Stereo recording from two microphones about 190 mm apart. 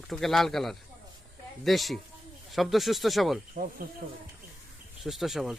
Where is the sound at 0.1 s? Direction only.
Centre (ahead or behind).